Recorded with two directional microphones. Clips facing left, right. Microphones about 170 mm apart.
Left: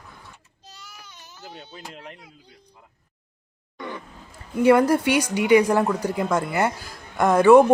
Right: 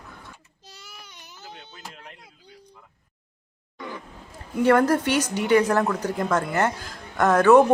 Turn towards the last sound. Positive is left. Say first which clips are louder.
# left 2 dB
turn(degrees=10)  # may be behind; listen again after turning